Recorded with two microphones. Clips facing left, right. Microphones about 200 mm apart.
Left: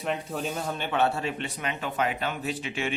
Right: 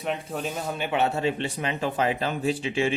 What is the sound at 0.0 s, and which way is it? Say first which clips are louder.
Speech: right 1 dB; centre (ahead or behind).